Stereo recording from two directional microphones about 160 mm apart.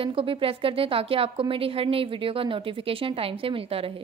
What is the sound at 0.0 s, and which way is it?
A woman's voice, 35° right (ahead or behind).